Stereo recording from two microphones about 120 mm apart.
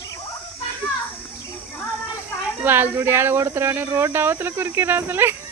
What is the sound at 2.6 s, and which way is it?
Speech, 15° right (ahead or behind).